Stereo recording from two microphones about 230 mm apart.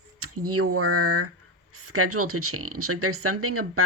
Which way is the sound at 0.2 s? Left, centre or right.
Right.